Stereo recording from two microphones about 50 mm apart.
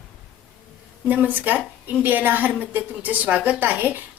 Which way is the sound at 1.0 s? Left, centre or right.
Right.